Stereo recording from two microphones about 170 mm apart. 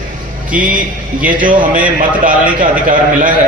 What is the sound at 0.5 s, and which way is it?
Speech, 10° right (ahead or behind).